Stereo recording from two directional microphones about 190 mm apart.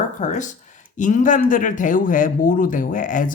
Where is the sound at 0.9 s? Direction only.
40° left (ahead or behind).